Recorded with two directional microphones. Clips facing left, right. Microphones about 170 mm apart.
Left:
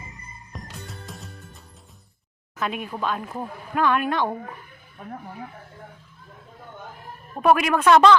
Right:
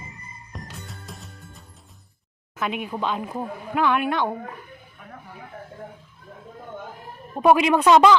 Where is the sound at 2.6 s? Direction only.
15° right (ahead or behind).